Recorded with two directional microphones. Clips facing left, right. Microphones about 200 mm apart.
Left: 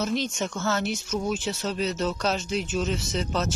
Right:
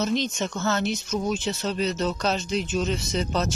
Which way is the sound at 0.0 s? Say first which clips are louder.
Right 2 dB; 10° left (ahead or behind).